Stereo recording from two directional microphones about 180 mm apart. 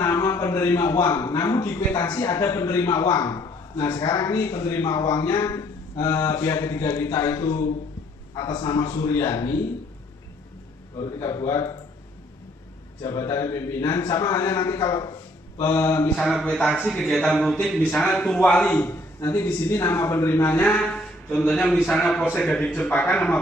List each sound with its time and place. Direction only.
0.0 s a man's voice: 15° left (ahead or behind)
11.0 s a man's voice: 20° left (ahead or behind)
13.0 s a man's voice: 20° left (ahead or behind)
16.2 s a man's voice: centre (ahead or behind)